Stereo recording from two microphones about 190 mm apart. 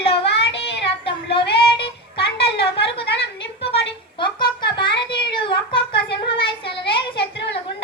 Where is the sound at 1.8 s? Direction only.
30° left (ahead or behind).